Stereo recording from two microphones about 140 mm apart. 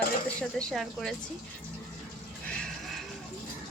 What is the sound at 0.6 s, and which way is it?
Speech, 5° left (ahead or behind).